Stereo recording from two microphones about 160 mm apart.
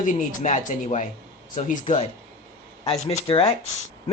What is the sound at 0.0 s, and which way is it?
Speech, 50° left (ahead or behind).